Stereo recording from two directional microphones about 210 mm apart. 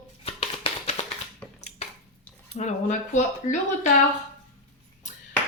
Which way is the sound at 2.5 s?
35° left (ahead or behind).